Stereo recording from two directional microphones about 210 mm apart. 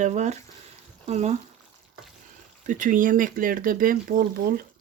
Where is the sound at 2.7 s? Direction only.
40° right (ahead or behind).